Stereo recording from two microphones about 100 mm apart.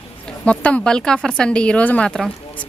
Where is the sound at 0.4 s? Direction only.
10° left (ahead or behind).